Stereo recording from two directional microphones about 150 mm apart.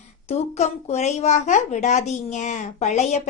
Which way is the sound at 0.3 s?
45° left (ahead or behind).